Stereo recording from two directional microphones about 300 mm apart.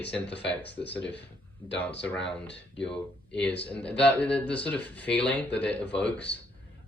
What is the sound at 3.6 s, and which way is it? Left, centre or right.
Speech, centre.